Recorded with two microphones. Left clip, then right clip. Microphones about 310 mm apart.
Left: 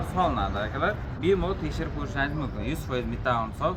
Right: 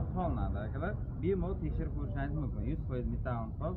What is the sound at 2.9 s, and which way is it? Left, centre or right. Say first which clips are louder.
Speech: left 14 dB; centre.